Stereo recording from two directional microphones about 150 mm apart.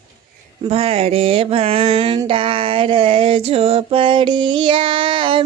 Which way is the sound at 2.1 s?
35° right (ahead or behind).